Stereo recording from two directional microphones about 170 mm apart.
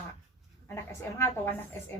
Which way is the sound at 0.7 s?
15° left (ahead or behind).